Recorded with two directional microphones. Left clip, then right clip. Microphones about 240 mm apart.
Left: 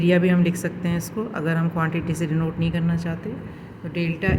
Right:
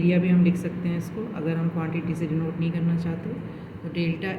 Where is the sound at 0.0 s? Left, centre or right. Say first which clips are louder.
Left 4 dB; left.